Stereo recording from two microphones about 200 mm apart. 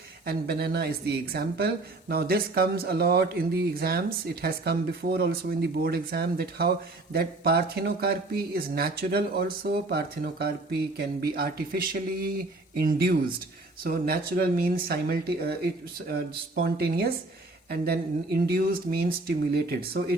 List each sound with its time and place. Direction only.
0.3 s speech: 50° right (ahead or behind)